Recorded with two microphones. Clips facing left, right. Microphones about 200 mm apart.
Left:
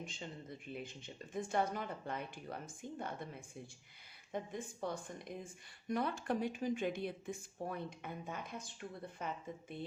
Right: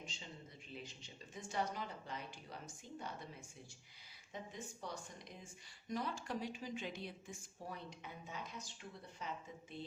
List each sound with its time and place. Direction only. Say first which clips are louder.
0.0 s a man's voice: left 6 dB; 55° left (ahead or behind)
4.3 s speech: left 7 dB; 55° left (ahead or behind)